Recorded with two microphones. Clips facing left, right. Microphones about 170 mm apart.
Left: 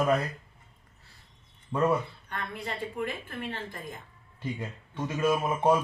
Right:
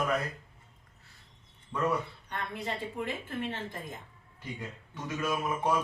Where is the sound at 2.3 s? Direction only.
20° right (ahead or behind).